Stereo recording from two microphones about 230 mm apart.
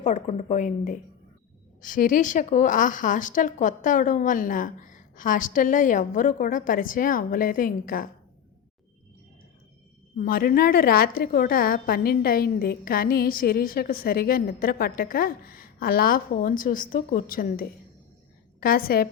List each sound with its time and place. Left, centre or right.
0.0 s a woman's voice: left
10.2 s a woman's voice: left